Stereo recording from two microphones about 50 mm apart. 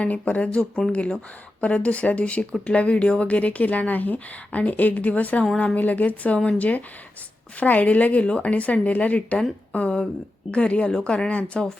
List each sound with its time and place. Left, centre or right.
0.0 s speech: left
0.6 s speech: centre
0.9 s speech: left